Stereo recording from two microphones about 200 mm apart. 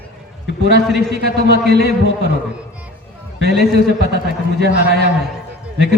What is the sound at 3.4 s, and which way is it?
Speech, 55° right (ahead or behind).